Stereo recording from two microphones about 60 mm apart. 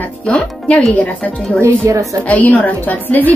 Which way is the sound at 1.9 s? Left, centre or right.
Right.